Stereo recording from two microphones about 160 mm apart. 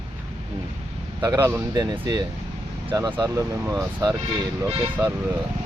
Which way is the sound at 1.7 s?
25° right (ahead or behind).